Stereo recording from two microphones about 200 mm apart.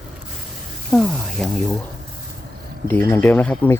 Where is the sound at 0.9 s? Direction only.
Centre (ahead or behind).